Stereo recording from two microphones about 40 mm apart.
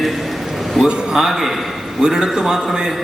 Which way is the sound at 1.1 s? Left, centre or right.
Centre.